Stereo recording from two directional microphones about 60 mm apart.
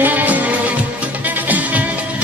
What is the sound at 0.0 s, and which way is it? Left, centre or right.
Music, right.